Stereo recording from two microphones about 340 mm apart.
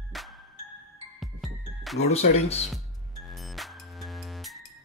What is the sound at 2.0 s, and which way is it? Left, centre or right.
Speech, centre.